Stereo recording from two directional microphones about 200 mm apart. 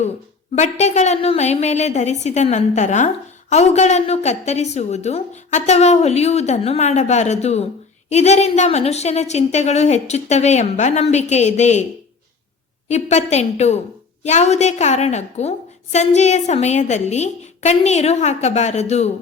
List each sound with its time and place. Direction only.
0.5 s a woman's voice: 35° left (ahead or behind)
12.9 s a woman's voice: 35° left (ahead or behind)